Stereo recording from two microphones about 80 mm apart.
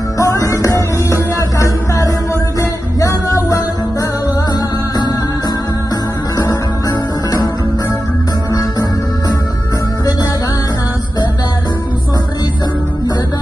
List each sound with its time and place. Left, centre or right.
0.2 s music: left